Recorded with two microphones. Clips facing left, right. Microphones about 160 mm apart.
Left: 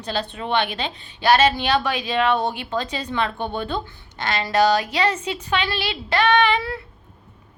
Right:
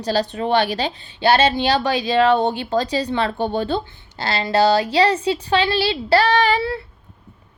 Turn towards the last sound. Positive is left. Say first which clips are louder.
# right 1 dB
turn(degrees=-35)  # may be behind; listen again after turning